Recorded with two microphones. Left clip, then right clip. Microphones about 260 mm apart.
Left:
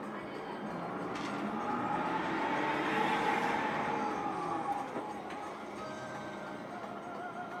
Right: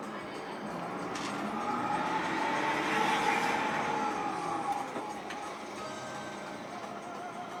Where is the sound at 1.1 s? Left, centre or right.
Centre.